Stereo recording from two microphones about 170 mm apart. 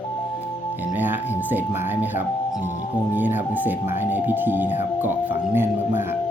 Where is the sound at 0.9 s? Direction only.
10° right (ahead or behind).